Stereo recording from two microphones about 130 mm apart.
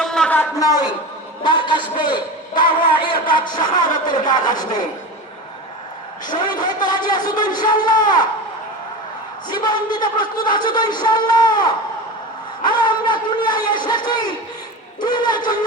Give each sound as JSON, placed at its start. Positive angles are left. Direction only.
{"t": 0.0, "sound": "a sound", "side_deg": 5}
{"t": 1.5, "sound": "a man's voice", "side_deg": 35}
{"t": 6.2, "sound": "a man's voice", "side_deg": 35}
{"t": 9.5, "sound": "a man's voice", "side_deg": 35}